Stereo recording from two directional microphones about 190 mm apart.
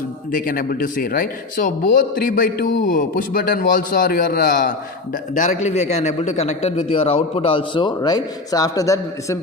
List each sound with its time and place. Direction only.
0.3 s a man's voice: 45° left (ahead or behind); by 9.4 s 15° left (ahead or behind)